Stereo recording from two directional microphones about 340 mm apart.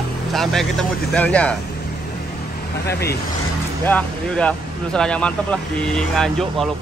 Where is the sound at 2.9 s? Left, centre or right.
Left.